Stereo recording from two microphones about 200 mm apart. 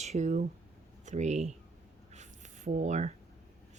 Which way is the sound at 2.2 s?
35° right (ahead or behind).